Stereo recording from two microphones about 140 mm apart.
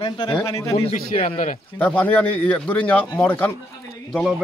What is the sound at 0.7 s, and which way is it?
Speech, 45° left (ahead or behind).